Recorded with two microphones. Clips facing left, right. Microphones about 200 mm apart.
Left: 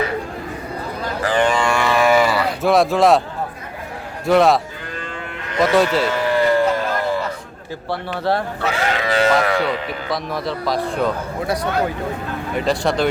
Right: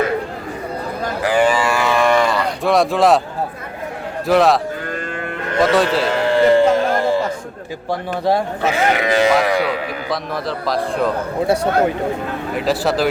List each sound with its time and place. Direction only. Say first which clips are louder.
1.2 s cattle: right 2 dB; 10° right (ahead or behind)
4.3 s speech: even; centre (ahead or behind)
5.7 s speech: left 3 dB; centre (ahead or behind)
6.1 s a sound: right 4 dB; 25° right (ahead or behind)
7.9 s speech: right 3 dB; 15° right (ahead or behind)
10.7 s speech: right 2 dB; centre (ahead or behind)
11.4 s speech: right 5 dB; 30° right (ahead or behind)
12.5 s speech: right 1 dB; 5° right (ahead or behind)